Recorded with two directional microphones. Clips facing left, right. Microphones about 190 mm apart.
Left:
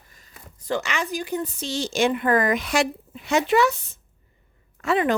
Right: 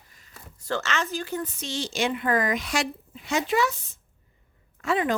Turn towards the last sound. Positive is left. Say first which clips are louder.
# left 3 dB
turn(degrees=70)  # may be behind; listen again after turning